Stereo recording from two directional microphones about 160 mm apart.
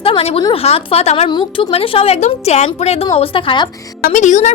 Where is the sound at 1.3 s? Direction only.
30° left (ahead or behind).